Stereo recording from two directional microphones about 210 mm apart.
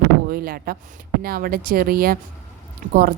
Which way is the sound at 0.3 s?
45° right (ahead or behind).